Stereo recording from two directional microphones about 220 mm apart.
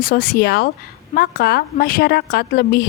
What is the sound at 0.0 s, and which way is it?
A woman's voice, 40° left (ahead or behind).